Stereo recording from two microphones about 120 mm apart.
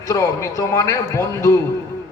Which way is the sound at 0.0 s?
25° left (ahead or behind).